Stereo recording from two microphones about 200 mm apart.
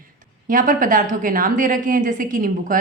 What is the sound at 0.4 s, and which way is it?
A woman's voice, 40° right (ahead or behind).